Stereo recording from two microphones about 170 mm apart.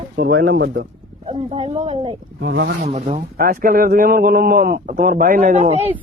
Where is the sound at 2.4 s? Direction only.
85° right.